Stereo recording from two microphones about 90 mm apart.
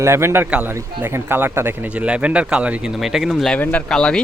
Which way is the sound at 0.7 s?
25° right (ahead or behind).